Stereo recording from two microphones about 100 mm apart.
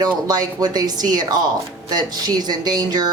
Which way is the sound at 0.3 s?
40° right (ahead or behind).